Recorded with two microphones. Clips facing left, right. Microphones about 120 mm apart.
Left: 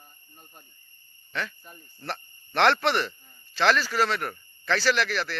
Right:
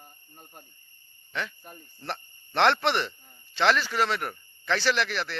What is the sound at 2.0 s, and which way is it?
Speech, 20° right (ahead or behind).